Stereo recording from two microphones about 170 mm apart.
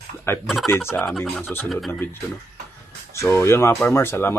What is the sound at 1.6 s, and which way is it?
Speech, centre (ahead or behind).